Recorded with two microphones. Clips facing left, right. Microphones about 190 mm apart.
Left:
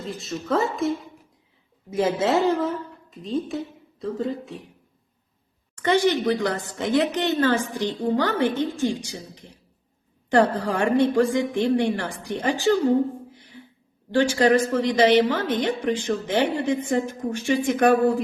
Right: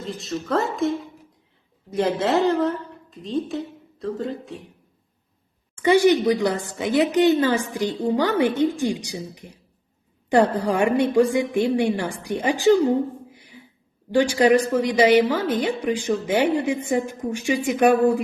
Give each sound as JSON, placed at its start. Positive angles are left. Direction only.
{"t": 0.1, "sound": "a woman's voice", "side_deg": 0}
{"t": 5.8, "sound": "speech", "side_deg": -10}
{"t": 14.1, "sound": "speech", "side_deg": -10}